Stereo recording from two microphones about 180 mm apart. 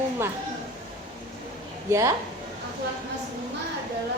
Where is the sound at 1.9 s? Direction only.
15° right (ahead or behind).